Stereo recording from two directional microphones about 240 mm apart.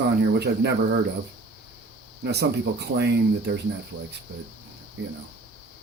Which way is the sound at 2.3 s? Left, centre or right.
Right.